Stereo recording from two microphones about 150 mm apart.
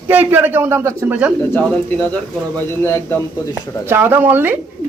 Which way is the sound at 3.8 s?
15° right (ahead or behind).